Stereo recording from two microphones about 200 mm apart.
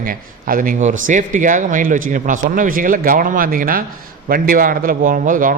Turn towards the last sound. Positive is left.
turn(degrees=-45)  # may be behind; listen again after turning